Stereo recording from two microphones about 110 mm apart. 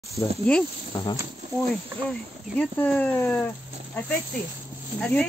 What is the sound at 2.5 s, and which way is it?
Speech, 15° left (ahead or behind).